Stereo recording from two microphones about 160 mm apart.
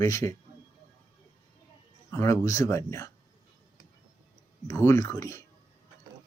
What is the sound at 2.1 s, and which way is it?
Speech, 15° left (ahead or behind).